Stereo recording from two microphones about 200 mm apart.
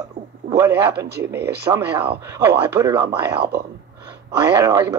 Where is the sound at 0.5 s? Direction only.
15° right (ahead or behind).